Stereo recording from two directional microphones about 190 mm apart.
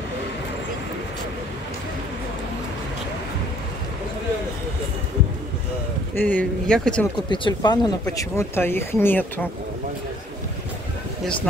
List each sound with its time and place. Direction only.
6.1 s speech: 10° left (ahead or behind)
7.2 s speech: 25° left (ahead or behind)